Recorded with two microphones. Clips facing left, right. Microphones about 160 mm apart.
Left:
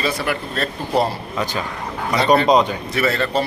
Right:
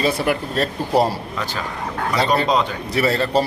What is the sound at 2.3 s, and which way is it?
Speech, 15° left (ahead or behind).